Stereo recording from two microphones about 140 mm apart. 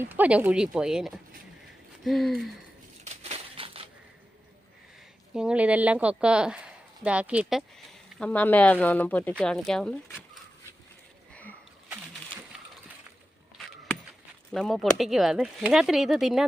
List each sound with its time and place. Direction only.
0.0 s a woman's voice: 10° right (ahead or behind)
3.0 s crushing: 45° right (ahead or behind)
5.3 s a woman's voice: 5° right (ahead or behind)
8.2 s speech: 10° left (ahead or behind)
11.3 s a sound: 10° left (ahead or behind)
14.5 s speech: centre (ahead or behind)